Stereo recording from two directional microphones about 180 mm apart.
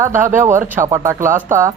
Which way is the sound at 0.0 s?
15° right (ahead or behind).